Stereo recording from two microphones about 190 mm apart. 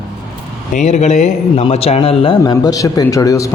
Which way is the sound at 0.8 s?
35° left (ahead or behind).